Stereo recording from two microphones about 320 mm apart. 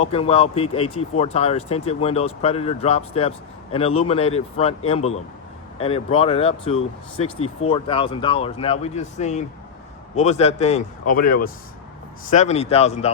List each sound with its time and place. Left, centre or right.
0.0 s speech: centre